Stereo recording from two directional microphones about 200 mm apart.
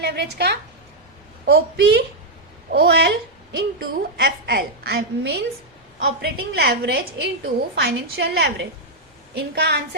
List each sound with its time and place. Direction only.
0.0 s a woman's voice: 55° right (ahead or behind)